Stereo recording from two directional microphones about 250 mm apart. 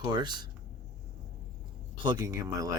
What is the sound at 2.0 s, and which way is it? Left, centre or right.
Speech, centre.